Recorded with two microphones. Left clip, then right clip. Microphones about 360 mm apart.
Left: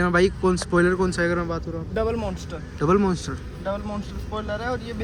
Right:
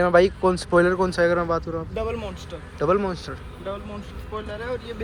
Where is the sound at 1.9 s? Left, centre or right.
Left.